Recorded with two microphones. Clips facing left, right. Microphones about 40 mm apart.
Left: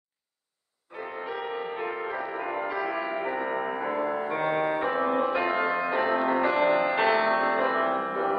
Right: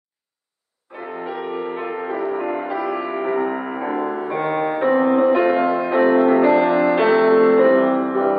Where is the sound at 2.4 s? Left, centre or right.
Centre.